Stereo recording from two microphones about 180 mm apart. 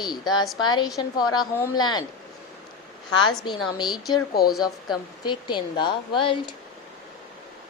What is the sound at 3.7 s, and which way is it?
A woman's voice, 25° left (ahead or behind).